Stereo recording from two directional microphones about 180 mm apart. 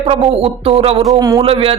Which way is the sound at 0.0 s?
35° right (ahead or behind).